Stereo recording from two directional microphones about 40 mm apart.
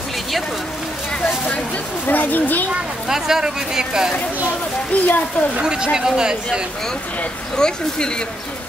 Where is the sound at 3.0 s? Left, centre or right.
Centre.